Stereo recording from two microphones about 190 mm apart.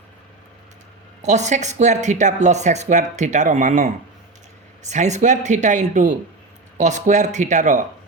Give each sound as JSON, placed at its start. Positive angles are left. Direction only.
{"t": 1.2, "sound": "speech", "side_deg": -40}